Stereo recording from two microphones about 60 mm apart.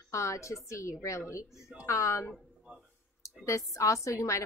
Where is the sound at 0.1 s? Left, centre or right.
Left.